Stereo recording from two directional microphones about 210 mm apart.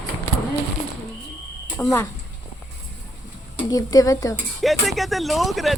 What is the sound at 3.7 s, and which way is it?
Speech, 15° left (ahead or behind).